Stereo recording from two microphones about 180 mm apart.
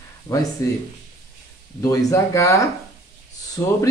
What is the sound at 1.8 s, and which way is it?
Speech, 20° left (ahead or behind).